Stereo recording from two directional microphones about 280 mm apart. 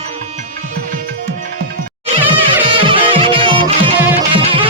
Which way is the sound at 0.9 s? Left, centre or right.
Right.